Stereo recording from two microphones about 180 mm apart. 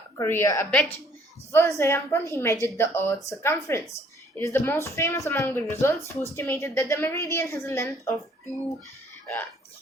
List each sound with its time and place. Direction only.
0.2 s speech: 15° left (ahead or behind)